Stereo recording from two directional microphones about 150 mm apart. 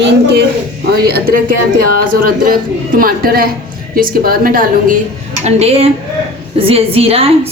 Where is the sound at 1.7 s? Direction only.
70° right (ahead or behind).